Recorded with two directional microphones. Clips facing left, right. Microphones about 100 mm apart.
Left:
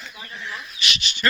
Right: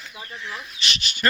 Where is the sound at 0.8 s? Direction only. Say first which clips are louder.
Left 1 dB; 40° right (ahead or behind).